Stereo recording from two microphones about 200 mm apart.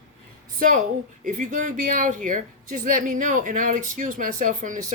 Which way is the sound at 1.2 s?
40° right (ahead or behind).